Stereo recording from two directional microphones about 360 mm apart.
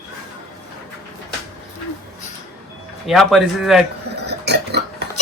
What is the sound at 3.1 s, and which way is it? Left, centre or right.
Speech, centre.